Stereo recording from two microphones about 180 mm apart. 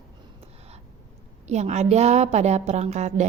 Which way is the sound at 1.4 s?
40° right (ahead or behind).